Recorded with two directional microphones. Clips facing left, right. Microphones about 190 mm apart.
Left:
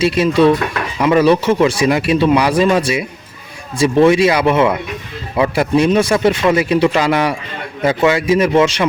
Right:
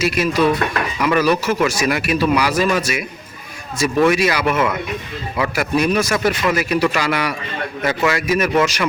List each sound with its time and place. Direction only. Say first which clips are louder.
0.0 s speech: left 5 dB; 30° left (ahead or behind)